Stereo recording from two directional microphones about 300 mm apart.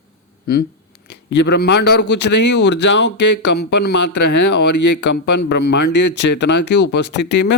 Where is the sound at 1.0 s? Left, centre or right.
Left.